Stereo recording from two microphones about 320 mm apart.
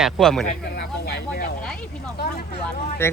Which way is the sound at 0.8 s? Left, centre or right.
Left.